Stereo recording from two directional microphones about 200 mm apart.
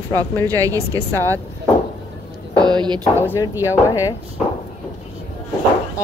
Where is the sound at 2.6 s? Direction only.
20° right (ahead or behind).